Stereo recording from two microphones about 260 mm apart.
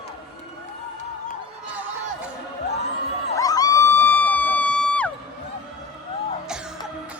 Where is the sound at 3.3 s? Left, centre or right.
Centre.